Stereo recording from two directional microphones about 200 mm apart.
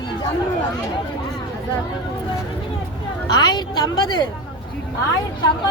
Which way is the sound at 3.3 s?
20° left (ahead or behind).